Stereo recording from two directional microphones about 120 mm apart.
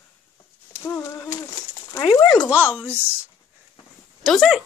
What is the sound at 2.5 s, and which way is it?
Speech, 10° right (ahead or behind).